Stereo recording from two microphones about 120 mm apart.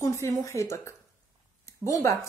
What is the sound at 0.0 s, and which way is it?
A woman's voice, 20° left (ahead or behind).